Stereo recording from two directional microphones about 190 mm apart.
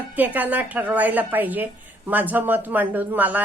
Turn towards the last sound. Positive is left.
turn(degrees=-10)  # may be behind; listen again after turning